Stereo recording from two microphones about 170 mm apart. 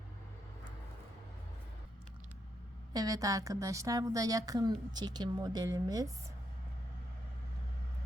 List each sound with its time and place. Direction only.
2.9 s a woman's voice: 20° right (ahead or behind)